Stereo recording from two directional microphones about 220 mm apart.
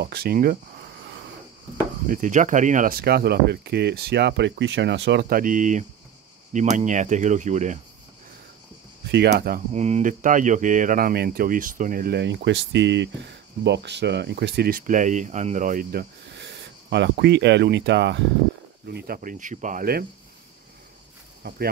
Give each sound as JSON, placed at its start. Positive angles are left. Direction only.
{"t": 0.0, "sound": "speech", "side_deg": -45}
{"t": 2.0, "sound": "speech", "side_deg": -35}
{"t": 5.4, "sound": "speech", "side_deg": -35}
{"t": 9.1, "sound": "speech", "side_deg": -50}
{"t": 9.7, "sound": "speech", "side_deg": -30}
{"t": 21.4, "sound": "speech", "side_deg": -45}